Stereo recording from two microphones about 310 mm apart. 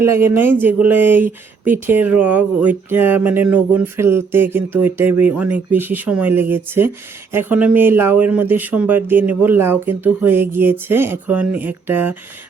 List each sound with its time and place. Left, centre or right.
0.0 s speech: centre